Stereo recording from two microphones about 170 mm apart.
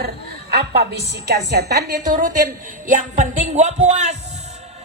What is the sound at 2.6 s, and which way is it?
A man's voice, 50° right (ahead or behind).